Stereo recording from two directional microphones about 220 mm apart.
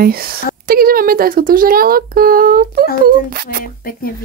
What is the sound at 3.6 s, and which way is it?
Speech, 40° left (ahead or behind).